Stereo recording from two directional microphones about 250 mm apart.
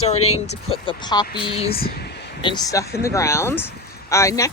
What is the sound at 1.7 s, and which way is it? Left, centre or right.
Speech, left.